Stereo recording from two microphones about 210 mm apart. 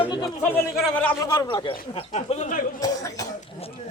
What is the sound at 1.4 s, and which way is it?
Speech, 20° left (ahead or behind).